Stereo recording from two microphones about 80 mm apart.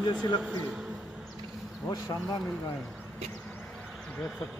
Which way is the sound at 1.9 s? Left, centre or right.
Left.